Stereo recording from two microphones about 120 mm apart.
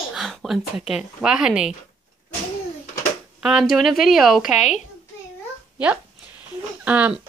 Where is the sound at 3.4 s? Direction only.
5° right (ahead or behind).